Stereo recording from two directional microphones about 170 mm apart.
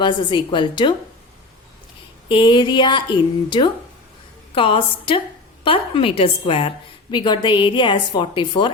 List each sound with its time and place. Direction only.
0.0 s a woman's voice: 25° left (ahead or behind)
2.3 s a woman's voice: 30° left (ahead or behind)